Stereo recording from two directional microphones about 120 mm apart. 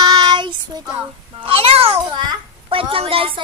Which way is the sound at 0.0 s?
35° right (ahead or behind).